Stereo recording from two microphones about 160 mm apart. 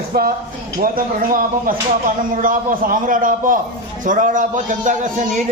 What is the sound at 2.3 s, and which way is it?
A man's voice, 55° right (ahead or behind).